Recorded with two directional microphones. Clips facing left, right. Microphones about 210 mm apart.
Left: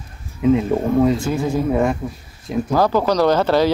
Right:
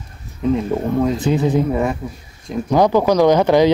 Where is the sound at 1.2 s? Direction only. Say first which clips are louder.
Right 4 dB; 20° right (ahead or behind).